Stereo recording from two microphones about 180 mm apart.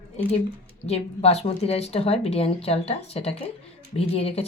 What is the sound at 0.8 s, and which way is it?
A woman's voice, 35° left (ahead or behind).